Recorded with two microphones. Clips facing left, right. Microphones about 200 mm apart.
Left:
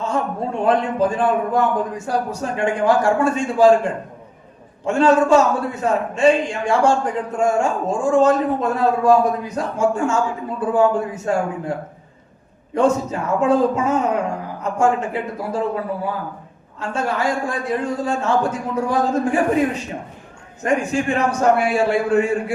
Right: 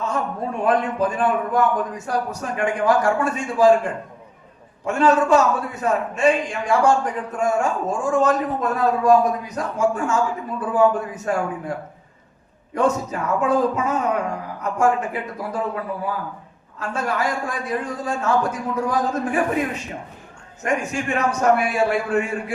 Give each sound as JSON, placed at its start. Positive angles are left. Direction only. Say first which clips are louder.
{"t": 0.0, "sound": "a man's voice", "louder": "left 2 dB", "side_deg": 30}
{"t": 12.7, "sound": "a man's voice", "louder": "left 3 dB", "side_deg": 25}
{"t": 20.7, "sound": "a man's voice", "louder": "left 4 dB", "side_deg": 30}